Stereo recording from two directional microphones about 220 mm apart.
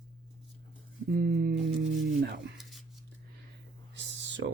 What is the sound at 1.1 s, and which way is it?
Speech, 45° right (ahead or behind).